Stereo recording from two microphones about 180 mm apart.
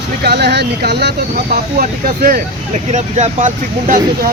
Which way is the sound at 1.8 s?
50° right (ahead or behind).